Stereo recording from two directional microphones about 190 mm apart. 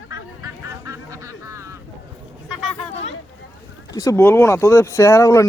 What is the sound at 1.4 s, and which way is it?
Vehicle, 15° right (ahead or behind).